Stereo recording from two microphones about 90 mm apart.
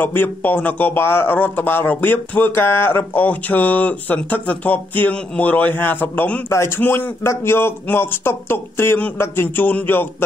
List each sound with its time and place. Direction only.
0.0 s a man's voice: 25° left (ahead or behind)
6.5 s a man's voice: 30° left (ahead or behind)